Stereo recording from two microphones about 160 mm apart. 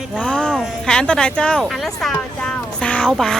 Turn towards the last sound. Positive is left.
turn(degrees=5)  # may be behind; listen again after turning